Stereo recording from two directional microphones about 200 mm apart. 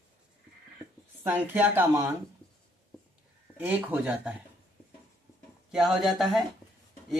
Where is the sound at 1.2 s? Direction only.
10° right (ahead or behind).